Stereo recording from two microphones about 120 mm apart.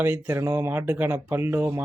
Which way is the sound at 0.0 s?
20° right (ahead or behind).